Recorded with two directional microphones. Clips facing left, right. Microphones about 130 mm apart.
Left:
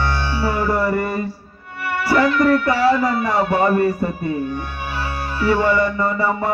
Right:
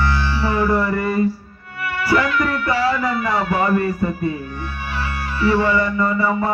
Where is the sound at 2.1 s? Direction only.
35° left (ahead or behind).